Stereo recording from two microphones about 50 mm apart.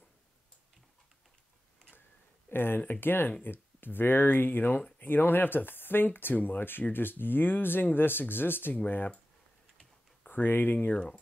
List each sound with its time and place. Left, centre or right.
2.5 s speech: left
10.2 s speech: left